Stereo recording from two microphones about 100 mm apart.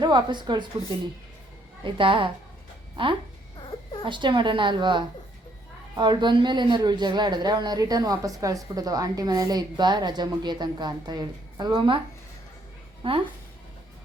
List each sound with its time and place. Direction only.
0.0 s speech: 50° right (ahead or behind)
1.8 s a woman's voice: 60° right (ahead or behind)
13.0 s speech: 65° right (ahead or behind)